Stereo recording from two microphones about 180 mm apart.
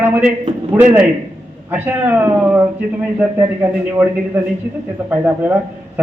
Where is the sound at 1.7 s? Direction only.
10° right (ahead or behind).